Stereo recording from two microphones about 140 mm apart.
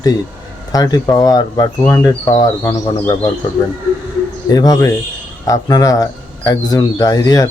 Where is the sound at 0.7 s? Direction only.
25° left (ahead or behind).